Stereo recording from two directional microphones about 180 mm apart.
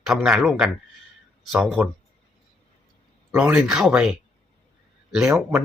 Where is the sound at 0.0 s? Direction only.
Centre (ahead or behind).